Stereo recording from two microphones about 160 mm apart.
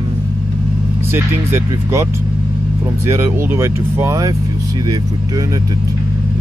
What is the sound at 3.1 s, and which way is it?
Speech, 15° right (ahead or behind).